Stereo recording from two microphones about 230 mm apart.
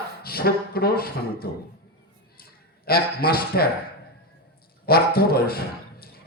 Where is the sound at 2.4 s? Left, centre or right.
Left.